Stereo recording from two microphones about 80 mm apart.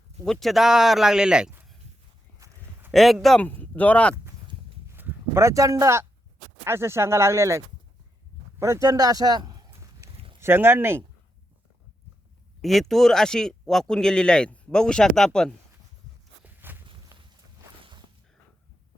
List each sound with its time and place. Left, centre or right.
0.3 s speech: centre
2.4 s a sound: right
2.9 s speech: centre
3.4 s speech: left
4.9 s speech: right
8.8 s speech: right
9.4 s a sound: right
10.4 s speech: right
12.6 s speech: centre
16.4 s walk: right